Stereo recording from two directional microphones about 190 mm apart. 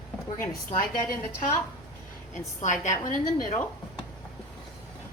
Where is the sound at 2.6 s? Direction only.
40° left (ahead or behind).